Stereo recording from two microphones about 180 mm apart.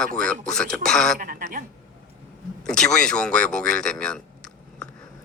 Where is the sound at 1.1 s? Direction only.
50° right (ahead or behind).